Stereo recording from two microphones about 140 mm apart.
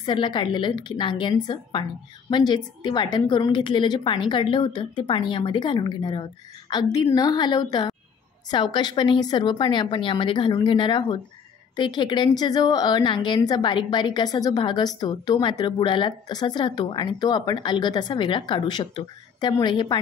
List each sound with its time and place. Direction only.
0.0 s a woman's voice: 35° left (ahead or behind)